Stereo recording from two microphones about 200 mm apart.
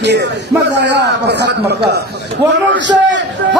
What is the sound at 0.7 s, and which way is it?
Speech, 60° right (ahead or behind).